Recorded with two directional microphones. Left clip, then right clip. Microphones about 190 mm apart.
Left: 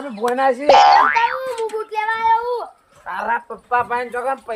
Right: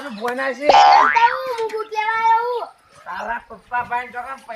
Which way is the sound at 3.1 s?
25° left (ahead or behind).